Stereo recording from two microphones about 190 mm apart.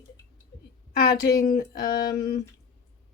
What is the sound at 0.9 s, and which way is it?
A woman's voice, 55° left (ahead or behind).